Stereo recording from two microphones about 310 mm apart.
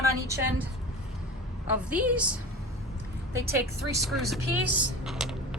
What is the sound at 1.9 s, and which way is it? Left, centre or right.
Speech, centre.